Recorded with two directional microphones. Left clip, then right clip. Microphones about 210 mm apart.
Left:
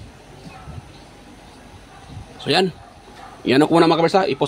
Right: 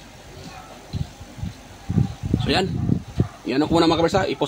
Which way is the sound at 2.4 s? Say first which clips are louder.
Left 4 dB; 35° left (ahead or behind).